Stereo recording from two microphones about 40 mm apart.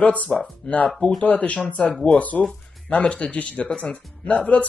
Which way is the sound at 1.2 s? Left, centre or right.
Left.